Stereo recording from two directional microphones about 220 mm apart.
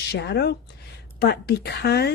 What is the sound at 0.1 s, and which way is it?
Speech, 50° left (ahead or behind).